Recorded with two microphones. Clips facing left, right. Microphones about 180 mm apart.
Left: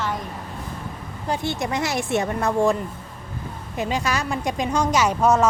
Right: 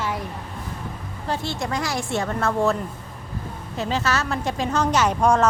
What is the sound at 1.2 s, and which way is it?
A woman's voice, 15° left (ahead or behind).